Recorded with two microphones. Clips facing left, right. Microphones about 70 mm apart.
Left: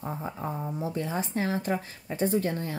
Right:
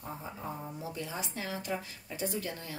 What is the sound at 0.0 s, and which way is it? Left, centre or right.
Speech, left.